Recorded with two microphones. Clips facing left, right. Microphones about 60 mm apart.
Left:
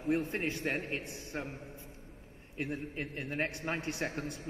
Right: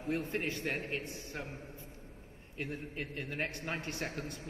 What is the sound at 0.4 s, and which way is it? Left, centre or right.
A man's voice, left.